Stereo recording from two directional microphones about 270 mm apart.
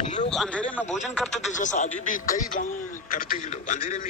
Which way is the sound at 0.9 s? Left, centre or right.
Left.